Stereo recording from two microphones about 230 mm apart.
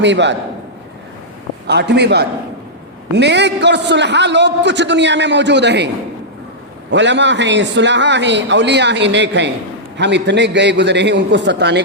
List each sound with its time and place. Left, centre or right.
0.0 s a man's voice: right
1.6 s a man's voice: right
6.9 s a man's voice: right